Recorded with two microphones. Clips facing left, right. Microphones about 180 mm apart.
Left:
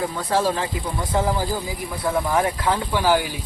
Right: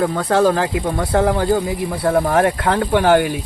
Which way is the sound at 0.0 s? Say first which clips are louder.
Right 7 dB; 65° right (ahead or behind).